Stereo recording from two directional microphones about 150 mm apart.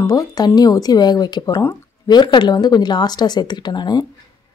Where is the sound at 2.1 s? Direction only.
30° left (ahead or behind).